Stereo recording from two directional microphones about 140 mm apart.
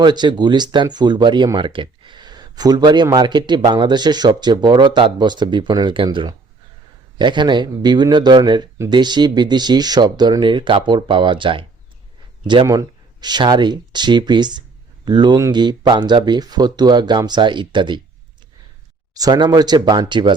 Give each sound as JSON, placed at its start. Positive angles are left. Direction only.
{"t": 0.0, "sound": "speech", "side_deg": -35}
{"t": 13.2, "sound": "speech", "side_deg": -30}
{"t": 19.1, "sound": "speech", "side_deg": -30}